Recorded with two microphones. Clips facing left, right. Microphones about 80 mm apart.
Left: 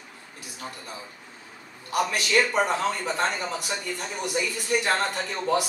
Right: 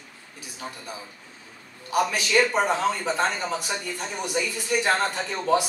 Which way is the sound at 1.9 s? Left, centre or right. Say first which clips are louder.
Right 1 dB; centre.